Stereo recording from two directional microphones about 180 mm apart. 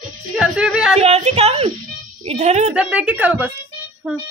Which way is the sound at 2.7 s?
5° right (ahead or behind).